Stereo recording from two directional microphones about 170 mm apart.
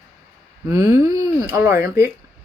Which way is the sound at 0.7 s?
20° right (ahead or behind).